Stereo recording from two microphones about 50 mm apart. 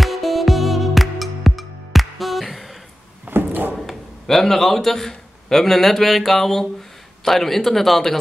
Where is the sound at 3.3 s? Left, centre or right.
Right.